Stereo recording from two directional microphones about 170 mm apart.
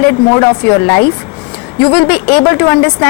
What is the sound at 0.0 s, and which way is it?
A woman's voice, 15° left (ahead or behind).